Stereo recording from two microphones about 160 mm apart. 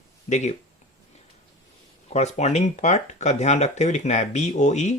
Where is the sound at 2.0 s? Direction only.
45° left (ahead or behind).